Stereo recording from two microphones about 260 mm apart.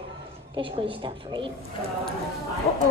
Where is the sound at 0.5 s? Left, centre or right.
Centre.